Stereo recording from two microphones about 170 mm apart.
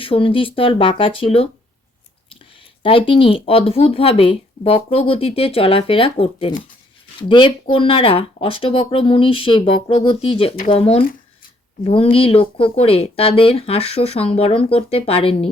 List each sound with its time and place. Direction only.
0.0 s speech: 30° left (ahead or behind)
2.8 s speech: 30° left (ahead or behind)